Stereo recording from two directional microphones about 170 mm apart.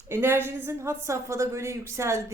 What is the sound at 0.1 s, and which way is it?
Speech, 15° right (ahead or behind).